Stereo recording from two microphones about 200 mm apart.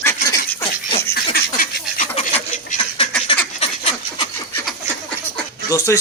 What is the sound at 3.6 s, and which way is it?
Fowl, 30° left (ahead or behind).